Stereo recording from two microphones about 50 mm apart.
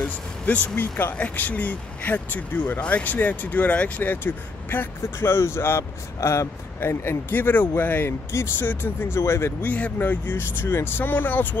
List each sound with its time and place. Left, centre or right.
0.0 s speech: left
0.7 s speech: left
1.1 s speech: left
4.1 s speech: left
5.8 s speech: left
6.8 s speech: left
9.2 s speech: left
9.6 s speech: left